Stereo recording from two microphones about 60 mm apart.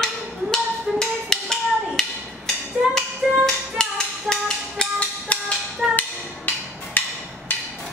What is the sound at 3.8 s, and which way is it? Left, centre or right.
Music, centre.